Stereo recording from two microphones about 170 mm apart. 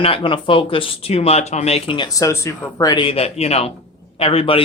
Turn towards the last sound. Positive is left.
turn(degrees=35)  # may be behind; listen again after turning